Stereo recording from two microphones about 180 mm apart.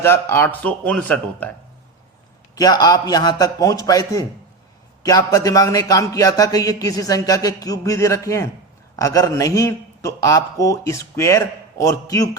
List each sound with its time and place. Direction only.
0.0 s speech: 15° left (ahead or behind)
2.6 s speech: 20° left (ahead or behind)